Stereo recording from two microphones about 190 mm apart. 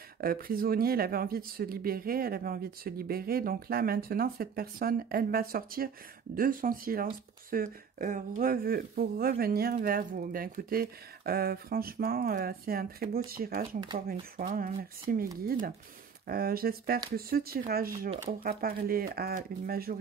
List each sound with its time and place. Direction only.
0.2 s speech: 50° right (ahead or behind)
16.3 s speech: 50° right (ahead or behind)